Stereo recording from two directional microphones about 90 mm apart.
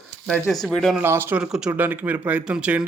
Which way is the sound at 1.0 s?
25° right (ahead or behind).